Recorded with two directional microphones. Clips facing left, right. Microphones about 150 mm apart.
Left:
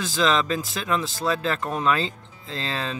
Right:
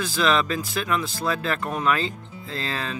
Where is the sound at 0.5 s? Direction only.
25° left (ahead or behind).